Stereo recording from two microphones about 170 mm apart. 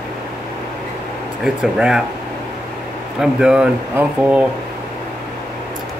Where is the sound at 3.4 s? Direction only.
5° right (ahead or behind).